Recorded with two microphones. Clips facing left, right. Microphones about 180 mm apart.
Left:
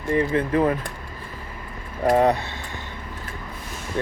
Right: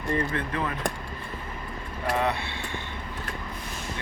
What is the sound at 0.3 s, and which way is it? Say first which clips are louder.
Speech: left 10 dB; 35° left (ahead or behind).